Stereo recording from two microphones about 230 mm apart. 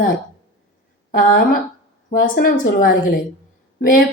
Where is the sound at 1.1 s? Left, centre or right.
Left.